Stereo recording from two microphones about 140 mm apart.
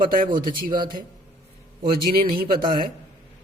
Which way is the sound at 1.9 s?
90° right.